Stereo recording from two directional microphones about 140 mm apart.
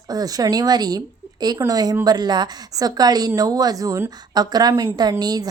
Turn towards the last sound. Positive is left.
turn(degrees=-25)  # may be behind; listen again after turning